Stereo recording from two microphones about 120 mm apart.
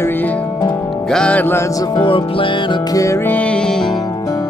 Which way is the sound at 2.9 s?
25° left (ahead or behind).